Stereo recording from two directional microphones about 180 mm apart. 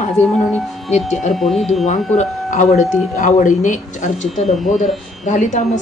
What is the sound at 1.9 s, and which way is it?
A woman's voice, 45° left (ahead or behind).